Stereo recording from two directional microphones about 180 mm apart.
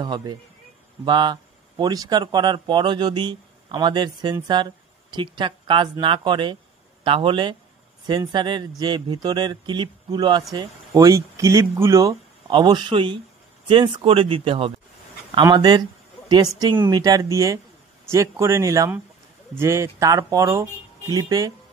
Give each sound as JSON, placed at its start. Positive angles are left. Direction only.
{"t": 0.0, "sound": "speech", "side_deg": -25}